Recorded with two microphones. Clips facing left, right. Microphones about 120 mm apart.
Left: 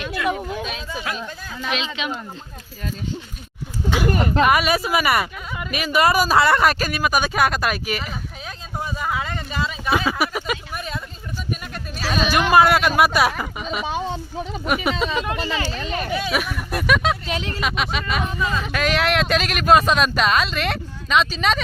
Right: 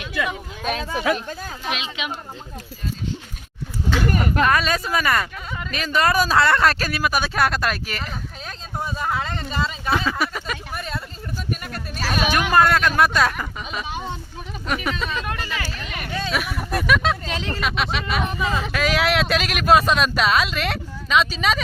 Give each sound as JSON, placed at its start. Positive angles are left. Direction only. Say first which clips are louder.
{"t": 0.0, "sound": "a sound", "louder": "left 3 dB", "side_deg": 55}
{"t": 0.6, "sound": "speech", "louder": "right 5 dB", "side_deg": -55}
{"t": 2.0, "sound": "speech", "louder": "left 2 dB", "side_deg": -10}
{"t": 3.9, "sound": "speech", "louder": "left 2 dB", "side_deg": 15}
{"t": 12.3, "sound": "speech", "louder": "left 3 dB", "side_deg": 10}
{"t": 14.6, "sound": "speech", "louder": "left 3 dB", "side_deg": 15}
{"t": 16.1, "sound": "speech", "louder": "left 1 dB", "side_deg": 10}
{"t": 16.8, "sound": "speech", "louder": "left 1 dB", "side_deg": 0}
{"t": 17.2, "sound": "speech", "louder": "left 2 dB", "side_deg": 20}
{"t": 17.6, "sound": "speech", "louder": "right 1 dB", "side_deg": 0}
{"t": 18.3, "sound": "speech", "louder": "even", "side_deg": -15}
{"t": 18.6, "sound": "speech", "louder": "left 1 dB", "side_deg": 0}